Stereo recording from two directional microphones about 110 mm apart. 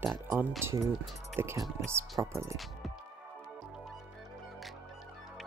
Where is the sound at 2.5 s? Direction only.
Centre (ahead or behind).